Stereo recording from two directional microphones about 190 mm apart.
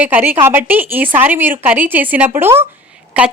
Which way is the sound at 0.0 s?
10° right (ahead or behind).